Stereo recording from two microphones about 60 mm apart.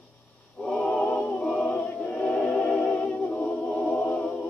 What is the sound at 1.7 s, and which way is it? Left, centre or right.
Choir, left.